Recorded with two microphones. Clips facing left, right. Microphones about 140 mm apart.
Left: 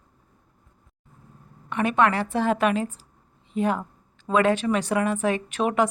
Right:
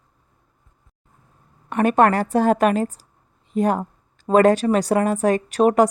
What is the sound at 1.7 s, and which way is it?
A woman's voice, 45° right (ahead or behind).